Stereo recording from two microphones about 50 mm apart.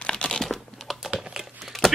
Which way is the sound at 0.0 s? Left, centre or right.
Centre.